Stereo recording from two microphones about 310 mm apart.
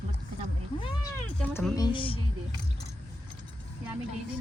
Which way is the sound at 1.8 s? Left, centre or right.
Centre.